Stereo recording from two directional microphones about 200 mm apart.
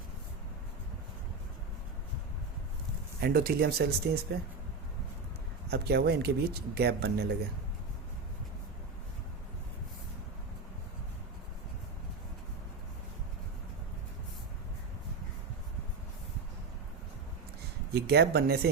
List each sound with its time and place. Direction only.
3.2 s speech: 50° right (ahead or behind)
5.6 s speech: 50° right (ahead or behind)
17.9 s speech: 55° right (ahead or behind)